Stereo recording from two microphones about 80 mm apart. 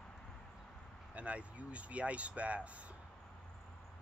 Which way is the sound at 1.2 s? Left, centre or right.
Centre.